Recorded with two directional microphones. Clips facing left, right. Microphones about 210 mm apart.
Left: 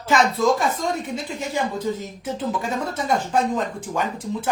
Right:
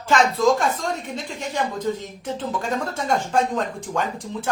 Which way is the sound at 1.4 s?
5° left (ahead or behind).